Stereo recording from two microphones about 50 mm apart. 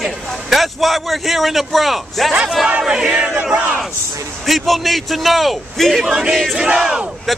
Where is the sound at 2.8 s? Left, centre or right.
Centre.